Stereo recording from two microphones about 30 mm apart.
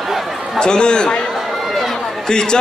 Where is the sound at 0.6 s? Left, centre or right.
Left.